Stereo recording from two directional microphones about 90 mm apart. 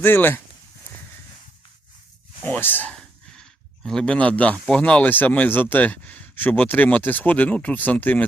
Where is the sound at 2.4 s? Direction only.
20° left (ahead or behind).